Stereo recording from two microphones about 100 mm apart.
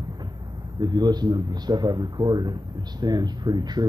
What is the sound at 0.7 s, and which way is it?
Speech, 45° right (ahead or behind).